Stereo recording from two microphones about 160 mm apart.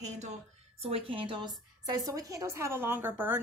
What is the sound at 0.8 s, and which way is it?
A woman's voice, 35° right (ahead or behind).